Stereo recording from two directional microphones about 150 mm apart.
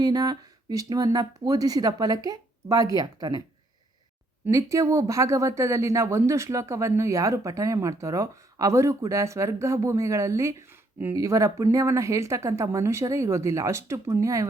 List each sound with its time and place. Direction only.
0.0 s speech: 25° right (ahead or behind)
4.4 s speech: 20° right (ahead or behind)